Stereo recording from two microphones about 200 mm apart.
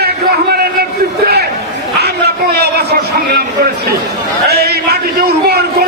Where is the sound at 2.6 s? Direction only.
55° right (ahead or behind).